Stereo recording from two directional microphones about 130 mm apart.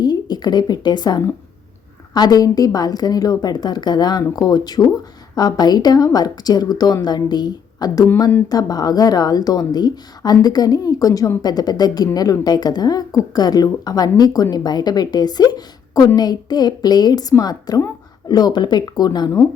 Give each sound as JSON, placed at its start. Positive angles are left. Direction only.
{"t": 0.0, "sound": "a woman's voice", "side_deg": 30}